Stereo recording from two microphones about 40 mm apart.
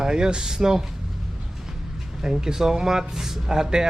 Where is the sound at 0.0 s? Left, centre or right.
Centre.